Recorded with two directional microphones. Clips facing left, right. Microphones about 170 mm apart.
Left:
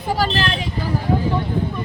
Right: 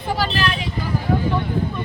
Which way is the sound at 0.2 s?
45° left (ahead or behind).